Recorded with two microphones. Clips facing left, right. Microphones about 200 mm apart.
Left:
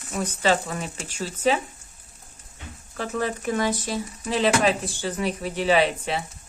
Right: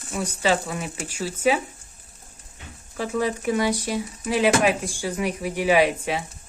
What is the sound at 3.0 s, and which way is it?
Speech, 15° right (ahead or behind).